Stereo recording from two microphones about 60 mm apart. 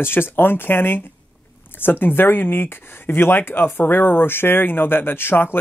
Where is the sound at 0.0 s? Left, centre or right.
Left.